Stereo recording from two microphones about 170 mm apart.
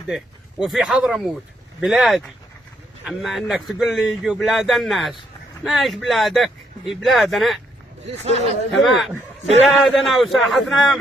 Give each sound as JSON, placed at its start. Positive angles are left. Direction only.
{"t": 0.6, "sound": "speech", "side_deg": 0}
{"t": 8.1, "sound": "speech", "side_deg": -40}
{"t": 8.8, "sound": "speech", "side_deg": 0}